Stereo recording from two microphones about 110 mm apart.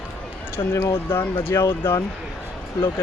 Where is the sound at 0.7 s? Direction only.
20° left (ahead or behind).